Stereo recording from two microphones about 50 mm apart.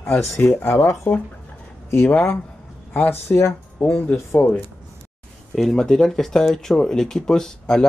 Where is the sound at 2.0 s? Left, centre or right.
Left.